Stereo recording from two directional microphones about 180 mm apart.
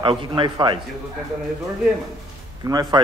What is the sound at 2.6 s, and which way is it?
Speech, 20° right (ahead or behind).